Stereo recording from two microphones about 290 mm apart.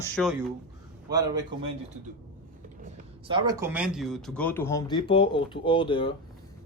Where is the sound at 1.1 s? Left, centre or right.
Centre.